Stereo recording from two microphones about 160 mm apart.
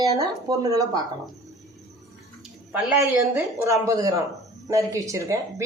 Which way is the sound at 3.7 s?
20° right (ahead or behind).